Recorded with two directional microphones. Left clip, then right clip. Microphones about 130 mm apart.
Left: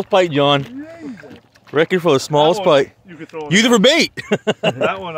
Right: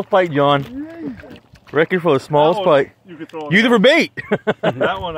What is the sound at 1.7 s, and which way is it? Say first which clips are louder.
Speech: left 1 dB; 25° left (ahead or behind).